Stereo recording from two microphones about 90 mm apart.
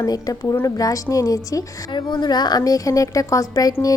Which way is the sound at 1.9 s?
60° left (ahead or behind).